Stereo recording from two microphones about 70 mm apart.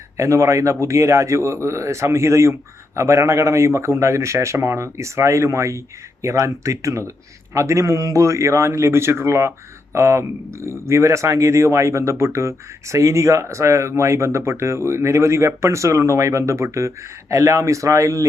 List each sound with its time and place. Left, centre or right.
0.2 s speech: right